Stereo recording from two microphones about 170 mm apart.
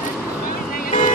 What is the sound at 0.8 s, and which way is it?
Vehicle, 50° left (ahead or behind).